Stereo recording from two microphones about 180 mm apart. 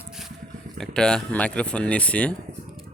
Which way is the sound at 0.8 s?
5° left (ahead or behind).